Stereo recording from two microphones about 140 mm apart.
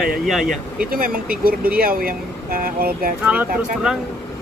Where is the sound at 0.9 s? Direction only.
90° right.